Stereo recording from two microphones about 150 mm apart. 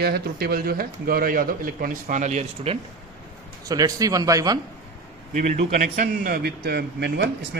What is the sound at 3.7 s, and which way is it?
Speech, 25° right (ahead or behind).